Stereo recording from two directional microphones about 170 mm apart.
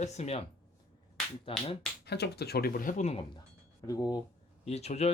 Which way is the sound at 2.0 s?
75° left (ahead or behind).